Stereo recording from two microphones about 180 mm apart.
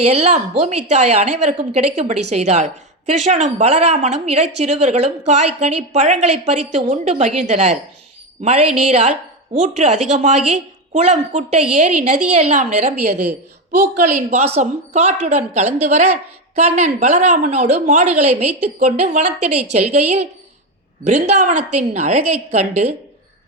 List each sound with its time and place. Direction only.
0.1 s speech: 35° right (ahead or behind)